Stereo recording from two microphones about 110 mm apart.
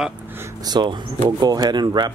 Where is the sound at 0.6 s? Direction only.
40° right (ahead or behind).